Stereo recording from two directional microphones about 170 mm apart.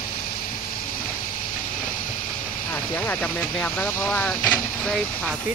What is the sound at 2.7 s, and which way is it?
Speech, 10° left (ahead or behind).